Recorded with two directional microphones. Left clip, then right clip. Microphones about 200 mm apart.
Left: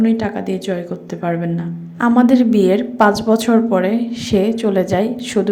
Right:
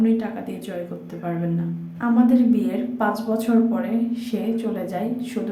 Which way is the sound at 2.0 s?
40° left (ahead or behind).